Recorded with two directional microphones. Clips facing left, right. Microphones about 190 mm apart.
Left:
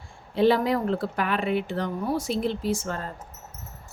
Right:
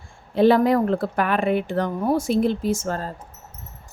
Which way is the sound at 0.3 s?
50° right (ahead or behind).